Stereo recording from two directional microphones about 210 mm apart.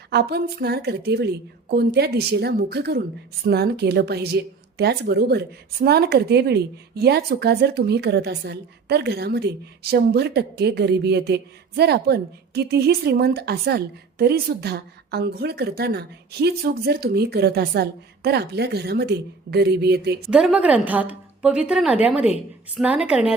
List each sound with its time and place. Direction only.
0.1 s a woman's voice: 50° right (ahead or behind)
20.3 s a woman's voice: 5° right (ahead or behind)